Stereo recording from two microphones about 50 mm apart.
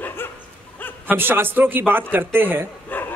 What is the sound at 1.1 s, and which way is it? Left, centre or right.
Speech, right.